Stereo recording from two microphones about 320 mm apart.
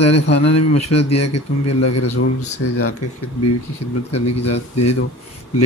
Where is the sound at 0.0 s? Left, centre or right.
Centre.